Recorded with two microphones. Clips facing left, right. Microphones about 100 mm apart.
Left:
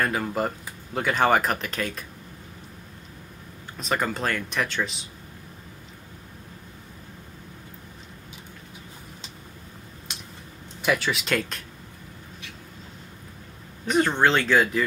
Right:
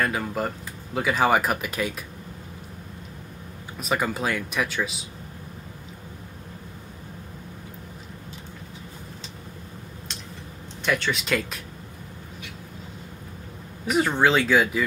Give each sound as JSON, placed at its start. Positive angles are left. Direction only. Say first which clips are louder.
{"t": 0.0, "sound": "speech", "louder": "left 1 dB", "side_deg": 0}
{"t": 3.8, "sound": "speech", "louder": "right 1 dB", "side_deg": -5}
{"t": 10.8, "sound": "speech", "louder": "left 1 dB", "side_deg": 5}
{"t": 13.8, "sound": "speech", "louder": "even", "side_deg": -5}